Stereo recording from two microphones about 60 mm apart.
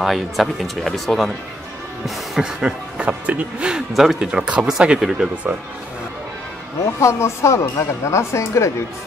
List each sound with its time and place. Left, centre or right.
0.0 s speech: centre
2.6 s speech: centre
3.9 s speech: centre
6.8 s speech: left